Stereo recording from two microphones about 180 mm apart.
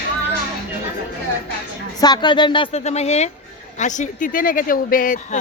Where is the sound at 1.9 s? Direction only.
20° left (ahead or behind).